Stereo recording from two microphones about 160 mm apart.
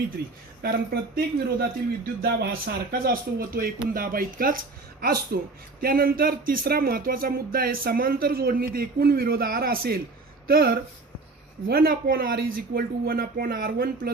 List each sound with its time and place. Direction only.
0.6 s speech: 80° right